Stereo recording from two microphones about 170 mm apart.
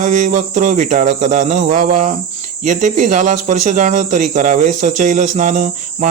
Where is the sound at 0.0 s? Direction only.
45° right (ahead or behind).